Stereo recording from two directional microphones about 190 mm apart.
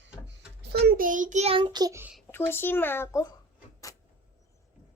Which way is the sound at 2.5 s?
10° left (ahead or behind).